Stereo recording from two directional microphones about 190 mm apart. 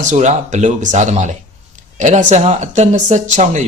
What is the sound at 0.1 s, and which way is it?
Speech, 40° right (ahead or behind).